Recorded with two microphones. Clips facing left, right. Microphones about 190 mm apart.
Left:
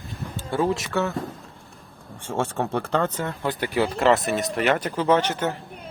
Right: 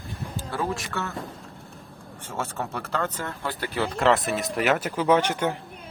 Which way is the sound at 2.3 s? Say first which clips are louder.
Left 6 dB; 30° left (ahead or behind).